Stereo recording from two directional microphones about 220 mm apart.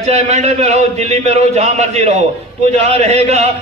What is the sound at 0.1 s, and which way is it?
A man's voice, 30° right (ahead or behind).